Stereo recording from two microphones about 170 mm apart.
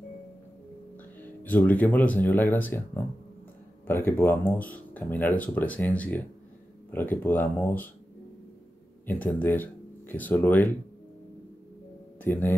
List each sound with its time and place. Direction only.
1.2 s speech: 10° left (ahead or behind)
3.8 s speech: 15° left (ahead or behind)
9.0 s speech: 10° left (ahead or behind)
12.2 s speech: 10° left (ahead or behind)